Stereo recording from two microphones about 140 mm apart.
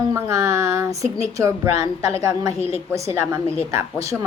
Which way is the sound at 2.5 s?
45° left (ahead or behind).